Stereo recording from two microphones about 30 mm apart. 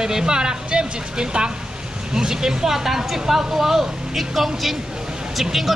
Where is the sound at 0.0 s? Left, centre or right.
Right.